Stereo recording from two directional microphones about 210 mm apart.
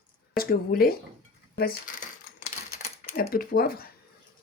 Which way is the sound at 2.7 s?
45° left (ahead or behind).